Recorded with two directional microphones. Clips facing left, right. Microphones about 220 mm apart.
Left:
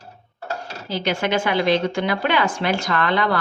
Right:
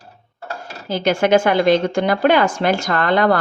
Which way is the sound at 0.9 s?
45° right (ahead or behind).